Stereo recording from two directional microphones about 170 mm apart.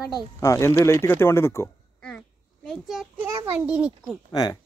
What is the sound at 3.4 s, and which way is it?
Speech, 10° right (ahead or behind).